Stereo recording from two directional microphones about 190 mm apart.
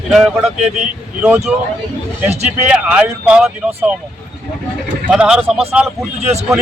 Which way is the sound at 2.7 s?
5° right (ahead or behind).